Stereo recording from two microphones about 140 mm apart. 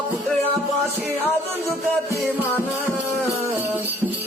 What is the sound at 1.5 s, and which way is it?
Music, 20° right (ahead or behind).